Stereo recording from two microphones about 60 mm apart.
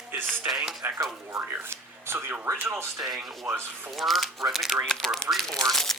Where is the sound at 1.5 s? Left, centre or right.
Right.